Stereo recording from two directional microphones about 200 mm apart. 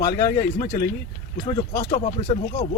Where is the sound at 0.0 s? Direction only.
20° left (ahead or behind).